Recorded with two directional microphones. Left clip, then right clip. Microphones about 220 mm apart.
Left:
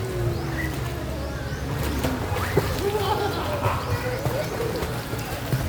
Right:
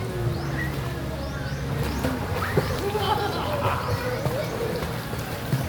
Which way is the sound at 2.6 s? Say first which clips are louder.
Left 2 dB; 25° left (ahead or behind).